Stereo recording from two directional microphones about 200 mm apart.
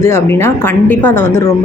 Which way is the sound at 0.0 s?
10° left (ahead or behind).